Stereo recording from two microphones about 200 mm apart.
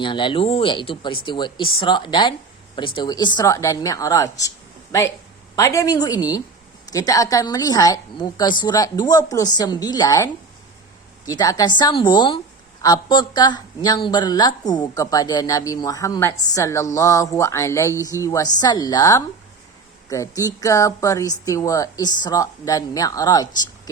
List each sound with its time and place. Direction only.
0.0 s a woman's voice: 25° left (ahead or behind)
5.5 s a woman's voice: 15° left (ahead or behind)
11.3 s a woman's voice: 20° left (ahead or behind)